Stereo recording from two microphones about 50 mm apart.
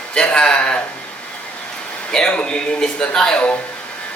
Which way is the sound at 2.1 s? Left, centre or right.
Centre.